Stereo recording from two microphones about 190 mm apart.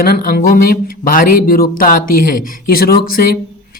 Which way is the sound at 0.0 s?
50° left (ahead or behind).